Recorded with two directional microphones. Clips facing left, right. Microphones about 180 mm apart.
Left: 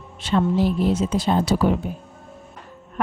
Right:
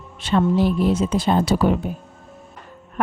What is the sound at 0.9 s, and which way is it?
Speech, 60° right (ahead or behind).